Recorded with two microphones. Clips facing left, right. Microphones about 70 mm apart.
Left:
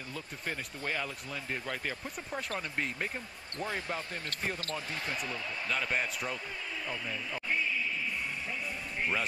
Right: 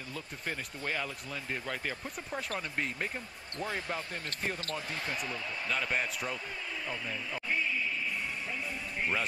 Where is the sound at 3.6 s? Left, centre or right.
Left.